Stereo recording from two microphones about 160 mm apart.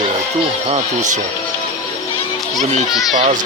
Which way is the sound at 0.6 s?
45° right (ahead or behind).